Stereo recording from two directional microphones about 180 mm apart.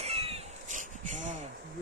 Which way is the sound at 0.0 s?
35° right (ahead or behind).